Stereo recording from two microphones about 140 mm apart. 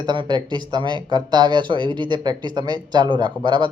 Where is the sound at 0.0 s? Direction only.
30° right (ahead or behind).